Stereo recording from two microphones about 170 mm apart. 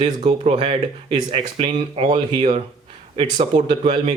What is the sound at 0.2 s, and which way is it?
Speech, 40° right (ahead or behind).